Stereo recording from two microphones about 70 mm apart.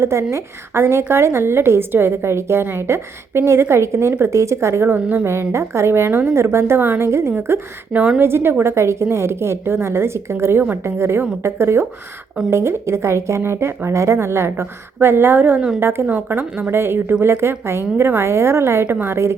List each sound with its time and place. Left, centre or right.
0.0 s a woman's voice: right
4.9 s a woman's voice: right
5.2 s a woman's voice: right
7.9 s a woman's voice: centre
8.2 s a woman's voice: right
16.0 s a woman's voice: right